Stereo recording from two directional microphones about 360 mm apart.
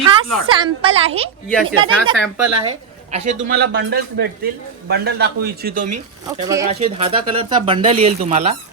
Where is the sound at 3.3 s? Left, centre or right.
Right.